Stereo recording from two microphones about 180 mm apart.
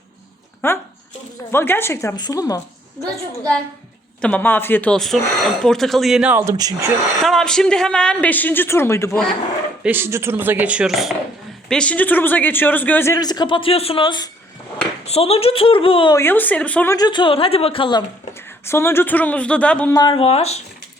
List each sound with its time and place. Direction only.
0.6 s a man's voice: 10° left (ahead or behind)
4.2 s speech: 10° left (ahead or behind); by 6.9 s 20° right (ahead or behind)
7.2 s speech: centre (ahead or behind)
9.8 s a man's voice: 10° right (ahead or behind); by 16.1 s 30° left (ahead or behind)
16.1 s a woman's voice: 10° left (ahead or behind); by 18.0 s 30° left (ahead or behind)
18.6 s a man's voice: 15° left (ahead or behind)
19.9 s a woman's voice: 25° left (ahead or behind)